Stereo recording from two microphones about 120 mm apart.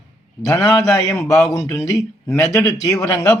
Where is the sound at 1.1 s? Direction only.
25° left (ahead or behind).